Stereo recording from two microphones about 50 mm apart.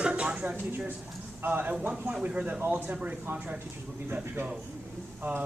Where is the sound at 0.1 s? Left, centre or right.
Right.